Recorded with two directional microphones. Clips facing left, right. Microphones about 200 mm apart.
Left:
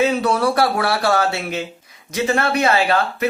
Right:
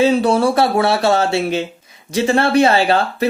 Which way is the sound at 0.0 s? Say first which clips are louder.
Right 4 dB; 30° right (ahead or behind).